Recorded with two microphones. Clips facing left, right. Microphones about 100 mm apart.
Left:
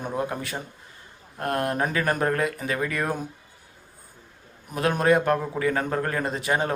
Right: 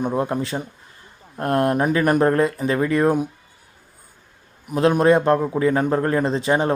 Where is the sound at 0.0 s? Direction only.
30° right (ahead or behind).